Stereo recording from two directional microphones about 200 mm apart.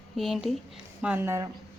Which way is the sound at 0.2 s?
Centre (ahead or behind).